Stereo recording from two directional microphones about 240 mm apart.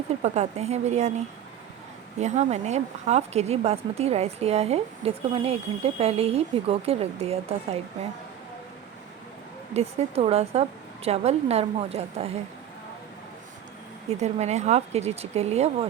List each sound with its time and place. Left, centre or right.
0.2 s speech: right
2.1 s speech: right
9.7 s speech: right
14.2 s speech: right